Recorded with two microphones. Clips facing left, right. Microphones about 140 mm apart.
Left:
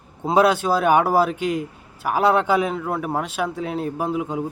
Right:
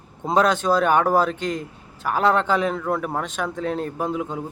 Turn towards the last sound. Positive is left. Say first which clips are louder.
# left 2 dB
turn(degrees=10)  # may be behind; listen again after turning